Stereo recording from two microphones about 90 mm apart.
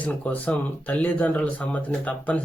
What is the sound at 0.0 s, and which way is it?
Speech, 15° left (ahead or behind).